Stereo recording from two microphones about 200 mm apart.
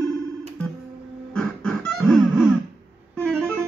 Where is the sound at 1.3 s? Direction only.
5° left (ahead or behind).